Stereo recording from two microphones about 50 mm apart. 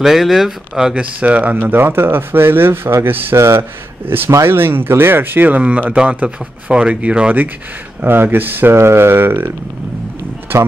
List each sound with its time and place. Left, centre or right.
0.0 s speech: centre
1.2 s speech: right
3.3 s a man's voice: right
4.0 s speech: right
8.0 s speech: right
8.7 s speech: right